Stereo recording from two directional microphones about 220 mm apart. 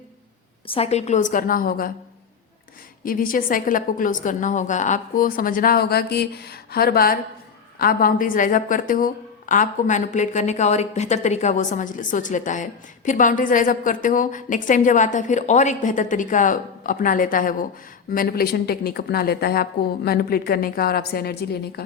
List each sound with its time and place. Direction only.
0.7 s a woman's voice: 30° left (ahead or behind)
3.0 s a woman's voice: 40° left (ahead or behind)